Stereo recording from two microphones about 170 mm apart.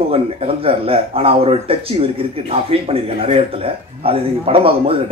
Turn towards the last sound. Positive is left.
turn(degrees=-35)  # may be behind; listen again after turning